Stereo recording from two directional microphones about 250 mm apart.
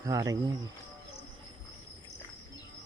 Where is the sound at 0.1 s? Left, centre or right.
Centre.